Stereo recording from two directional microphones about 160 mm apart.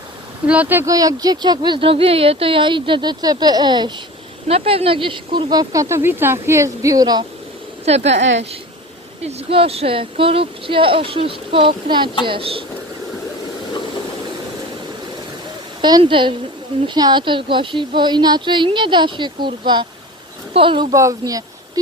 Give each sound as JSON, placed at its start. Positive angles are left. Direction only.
{"t": 0.4, "sound": "speech", "side_deg": -10}
{"t": 7.9, "sound": "speech", "side_deg": -40}
{"t": 9.2, "sound": "speech", "side_deg": -35}
{"t": 15.8, "sound": "speech", "side_deg": -25}
{"t": 20.9, "sound": "speech", "side_deg": -20}